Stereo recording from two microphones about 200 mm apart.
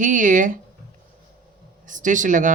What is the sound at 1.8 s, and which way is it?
Speech, 40° right (ahead or behind).